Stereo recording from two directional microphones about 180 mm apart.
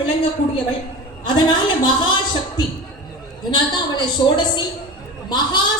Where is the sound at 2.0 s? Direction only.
25° left (ahead or behind).